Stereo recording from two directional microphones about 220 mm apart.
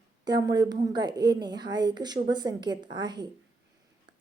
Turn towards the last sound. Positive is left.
turn(degrees=-20)  # may be behind; listen again after turning